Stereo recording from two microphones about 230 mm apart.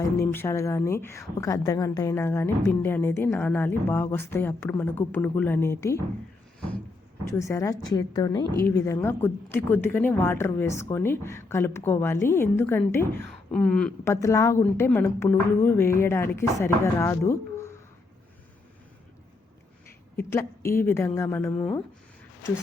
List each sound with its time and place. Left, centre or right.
0.0 s speech: centre
7.3 s speech: centre
20.1 s speech: centre